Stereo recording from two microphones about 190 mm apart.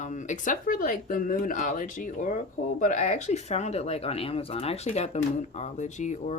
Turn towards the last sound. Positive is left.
turn(degrees=40)  # may be behind; listen again after turning